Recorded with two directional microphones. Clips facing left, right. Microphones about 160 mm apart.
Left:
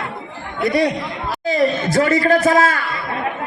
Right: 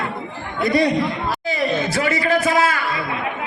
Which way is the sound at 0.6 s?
70° left (ahead or behind).